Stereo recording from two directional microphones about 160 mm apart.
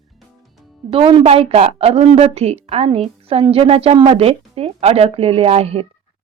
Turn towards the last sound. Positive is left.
turn(degrees=-40)  # may be behind; listen again after turning